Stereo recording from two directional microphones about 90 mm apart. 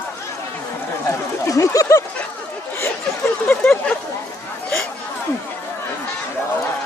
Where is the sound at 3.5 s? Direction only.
15° left (ahead or behind).